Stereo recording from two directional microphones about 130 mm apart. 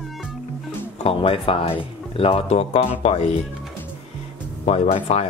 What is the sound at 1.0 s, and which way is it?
Speech, 45° left (ahead or behind).